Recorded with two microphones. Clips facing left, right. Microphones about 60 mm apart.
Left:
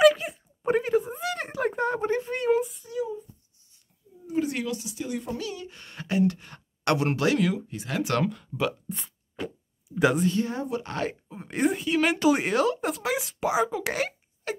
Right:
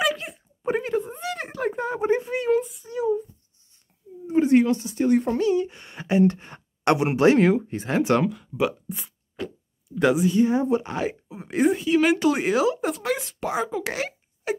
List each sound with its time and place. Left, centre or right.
0.0 s a sound: centre
2.0 s a sound: centre
2.3 s child singing: centre
3.0 s a sound: right
4.3 s speech: right
5.4 s speech: right
8.2 s speech: centre
9.4 s plop: centre
10.3 s speech: centre
14.5 s speech: centre